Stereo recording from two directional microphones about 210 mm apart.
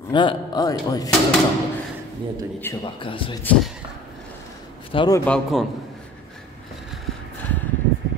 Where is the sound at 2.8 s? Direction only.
25° left (ahead or behind).